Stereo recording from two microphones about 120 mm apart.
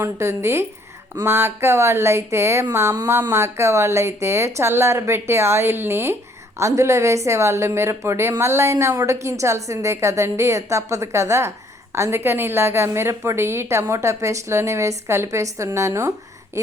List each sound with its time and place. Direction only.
0.0 s a woman's voice: 25° right (ahead or behind)